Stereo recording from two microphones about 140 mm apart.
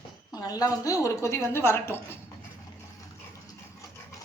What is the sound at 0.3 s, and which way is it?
A woman's voice, 25° left (ahead or behind).